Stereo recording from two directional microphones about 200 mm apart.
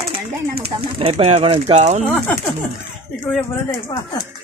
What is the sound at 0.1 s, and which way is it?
Speech, 30° right (ahead or behind).